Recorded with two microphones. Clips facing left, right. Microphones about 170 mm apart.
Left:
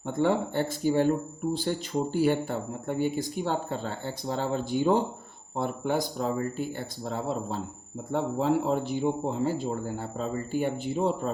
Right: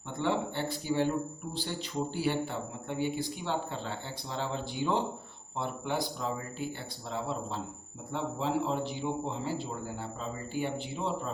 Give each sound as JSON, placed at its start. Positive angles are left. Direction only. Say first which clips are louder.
{"t": 0.1, "sound": "speech", "louder": "left 6 dB", "side_deg": 45}